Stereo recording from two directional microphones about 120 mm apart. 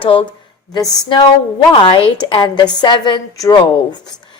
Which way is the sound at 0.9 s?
35° left (ahead or behind).